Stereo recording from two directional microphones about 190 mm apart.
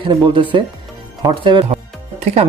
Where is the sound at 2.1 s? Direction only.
30° right (ahead or behind).